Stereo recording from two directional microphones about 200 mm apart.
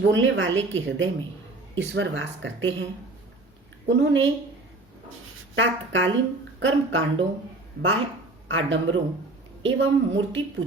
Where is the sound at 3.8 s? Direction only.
65° right (ahead or behind).